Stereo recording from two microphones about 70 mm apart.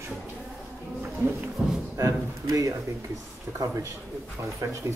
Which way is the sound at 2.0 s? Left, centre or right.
Right.